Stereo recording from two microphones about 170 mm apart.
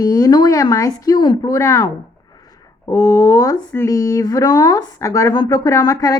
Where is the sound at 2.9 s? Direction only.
20° left (ahead or behind).